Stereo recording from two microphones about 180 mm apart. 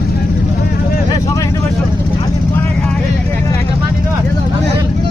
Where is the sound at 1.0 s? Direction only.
20° left (ahead or behind).